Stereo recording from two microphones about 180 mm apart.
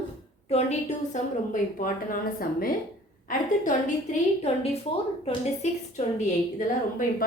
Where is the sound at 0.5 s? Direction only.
40° left (ahead or behind).